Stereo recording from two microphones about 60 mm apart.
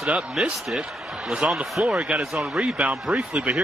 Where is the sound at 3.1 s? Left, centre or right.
Right.